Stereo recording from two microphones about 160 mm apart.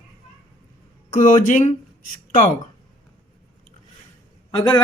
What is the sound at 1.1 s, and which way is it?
Speech, 50° left (ahead or behind).